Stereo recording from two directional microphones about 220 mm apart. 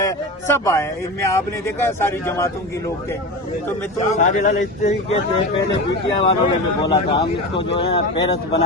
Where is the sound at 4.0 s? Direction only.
35° left (ahead or behind).